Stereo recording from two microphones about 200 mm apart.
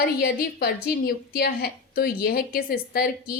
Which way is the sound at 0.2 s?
50° left (ahead or behind).